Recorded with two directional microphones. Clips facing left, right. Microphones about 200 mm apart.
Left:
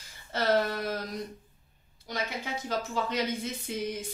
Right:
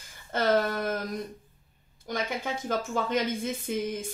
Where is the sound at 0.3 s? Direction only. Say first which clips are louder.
Right 2 dB; 50° right (ahead or behind).